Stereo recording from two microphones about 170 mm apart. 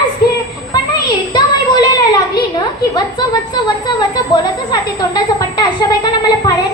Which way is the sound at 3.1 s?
25° left (ahead or behind).